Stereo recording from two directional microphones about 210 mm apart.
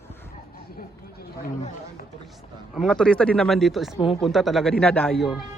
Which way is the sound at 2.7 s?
Centre (ahead or behind).